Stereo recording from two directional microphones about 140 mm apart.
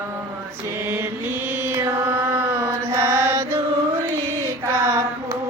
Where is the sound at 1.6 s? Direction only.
20° right (ahead or behind).